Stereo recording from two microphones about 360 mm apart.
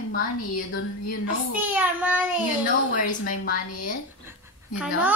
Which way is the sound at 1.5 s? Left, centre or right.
Centre.